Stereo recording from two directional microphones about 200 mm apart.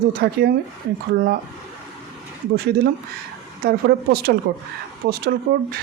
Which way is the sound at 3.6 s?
50° right (ahead or behind).